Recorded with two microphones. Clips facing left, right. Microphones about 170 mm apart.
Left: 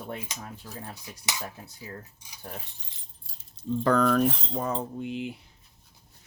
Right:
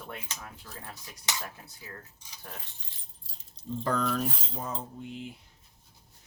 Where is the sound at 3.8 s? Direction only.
65° left (ahead or behind).